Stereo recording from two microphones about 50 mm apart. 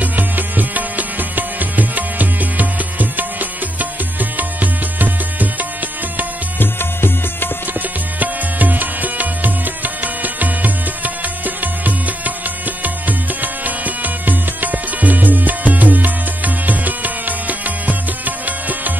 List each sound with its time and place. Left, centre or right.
0.0 s music: right
6.6 s music: left
8.2 s music: right